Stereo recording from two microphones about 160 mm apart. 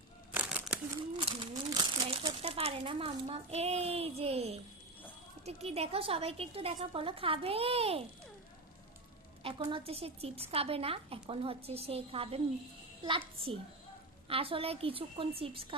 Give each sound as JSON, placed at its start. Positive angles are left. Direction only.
{"t": 0.3, "sound": "a sound", "side_deg": -5}
{"t": 1.1, "sound": "crumpling", "side_deg": -30}
{"t": 2.4, "sound": "speech", "side_deg": -40}
{"t": 9.4, "sound": "speech", "side_deg": -35}